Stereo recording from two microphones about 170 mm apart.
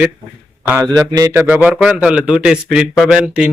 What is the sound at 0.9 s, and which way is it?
Speech, 20° right (ahead or behind).